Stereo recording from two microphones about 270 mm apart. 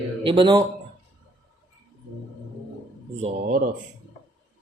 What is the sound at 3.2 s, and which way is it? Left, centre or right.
Speech, right.